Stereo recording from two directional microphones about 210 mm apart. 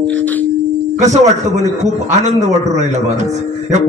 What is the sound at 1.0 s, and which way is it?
Speech, 35° right (ahead or behind).